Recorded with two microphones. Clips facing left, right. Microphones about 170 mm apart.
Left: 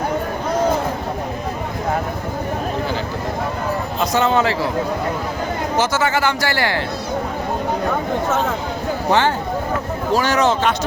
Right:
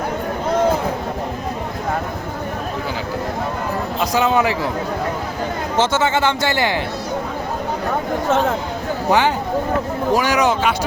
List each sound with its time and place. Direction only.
4.1 s speech: 15° right (ahead or behind)
5.7 s a man's voice: 25° right (ahead or behind)
9.0 s speech: 10° right (ahead or behind)